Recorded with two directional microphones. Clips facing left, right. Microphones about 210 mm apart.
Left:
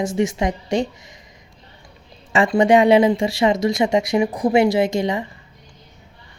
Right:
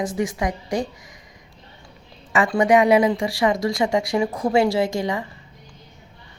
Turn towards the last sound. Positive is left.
turn(degrees=20)  # may be behind; listen again after turning